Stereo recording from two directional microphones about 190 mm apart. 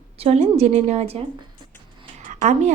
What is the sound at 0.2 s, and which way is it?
A woman's voice, 30° right (ahead or behind).